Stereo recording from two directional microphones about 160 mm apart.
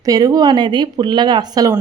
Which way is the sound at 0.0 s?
20° right (ahead or behind).